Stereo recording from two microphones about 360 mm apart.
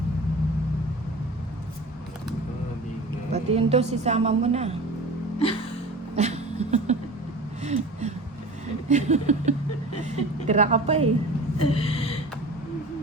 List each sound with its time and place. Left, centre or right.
3.3 s a woman's voice: centre
6.1 s a sound: centre
10.0 s a woman's voice: centre
11.6 s gasp: centre